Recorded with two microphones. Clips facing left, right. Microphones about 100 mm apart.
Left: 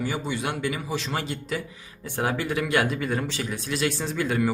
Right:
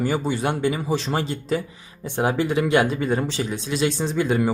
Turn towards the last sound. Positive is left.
turn(degrees=-25)  # may be behind; listen again after turning